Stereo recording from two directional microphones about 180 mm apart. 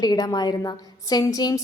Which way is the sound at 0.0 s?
20° left (ahead or behind).